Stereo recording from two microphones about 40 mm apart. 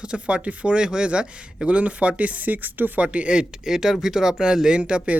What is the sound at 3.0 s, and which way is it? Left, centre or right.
Speech, right.